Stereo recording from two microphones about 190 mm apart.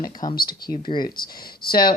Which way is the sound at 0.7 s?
25° left (ahead or behind).